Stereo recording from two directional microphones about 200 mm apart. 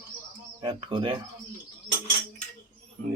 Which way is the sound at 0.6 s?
25° right (ahead or behind).